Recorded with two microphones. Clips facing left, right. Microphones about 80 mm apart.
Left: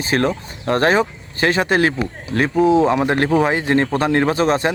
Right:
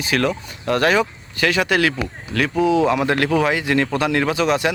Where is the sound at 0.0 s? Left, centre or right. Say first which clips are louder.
Left 2 dB; left.